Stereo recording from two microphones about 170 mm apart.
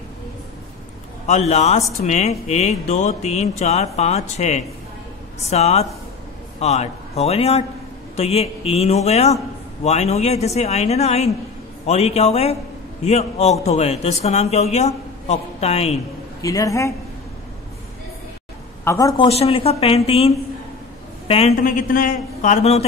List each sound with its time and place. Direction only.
1.2 s speech: 40° left (ahead or behind)
16.3 s speech: 20° left (ahead or behind)
18.9 s speech: 20° left (ahead or behind)
19.2 s speech: 35° left (ahead or behind)
21.6 s a man's voice: 55° left (ahead or behind)